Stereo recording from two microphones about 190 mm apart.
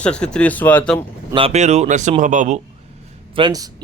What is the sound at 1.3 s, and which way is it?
Speech, 30° right (ahead or behind).